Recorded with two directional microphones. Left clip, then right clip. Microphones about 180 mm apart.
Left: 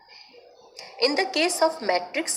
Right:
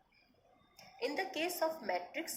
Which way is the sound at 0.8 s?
30° left (ahead or behind).